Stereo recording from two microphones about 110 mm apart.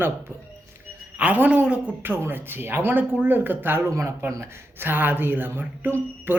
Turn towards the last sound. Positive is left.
turn(degrees=-20)  # may be behind; listen again after turning